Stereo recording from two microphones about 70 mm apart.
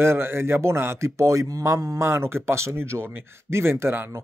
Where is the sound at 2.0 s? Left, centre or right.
Right.